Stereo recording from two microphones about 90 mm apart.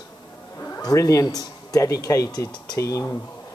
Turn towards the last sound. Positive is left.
turn(degrees=35)  # may be behind; listen again after turning